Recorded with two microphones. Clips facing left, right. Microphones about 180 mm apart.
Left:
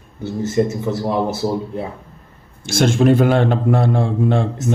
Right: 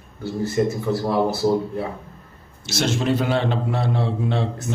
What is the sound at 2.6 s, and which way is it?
A man's voice, 50° left (ahead or behind).